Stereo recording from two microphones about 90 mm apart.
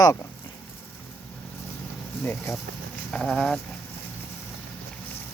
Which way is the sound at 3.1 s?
5° left (ahead or behind).